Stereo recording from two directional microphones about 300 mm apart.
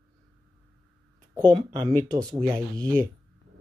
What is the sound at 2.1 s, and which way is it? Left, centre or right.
Speech, centre.